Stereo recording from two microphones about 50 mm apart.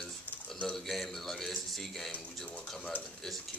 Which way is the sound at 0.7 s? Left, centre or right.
Centre.